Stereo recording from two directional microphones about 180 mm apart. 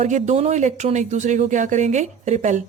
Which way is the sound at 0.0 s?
40° right (ahead or behind).